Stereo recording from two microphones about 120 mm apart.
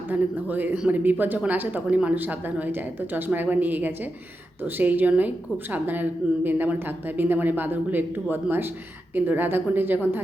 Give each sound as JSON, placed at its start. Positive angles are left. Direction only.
{"t": 0.1, "sound": "speech", "side_deg": -15}